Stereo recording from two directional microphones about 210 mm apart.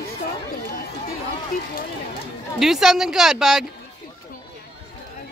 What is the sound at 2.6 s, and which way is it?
Speech, centre (ahead or behind).